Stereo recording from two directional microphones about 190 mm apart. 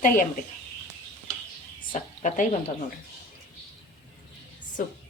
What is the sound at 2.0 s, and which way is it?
Speech, 40° left (ahead or behind).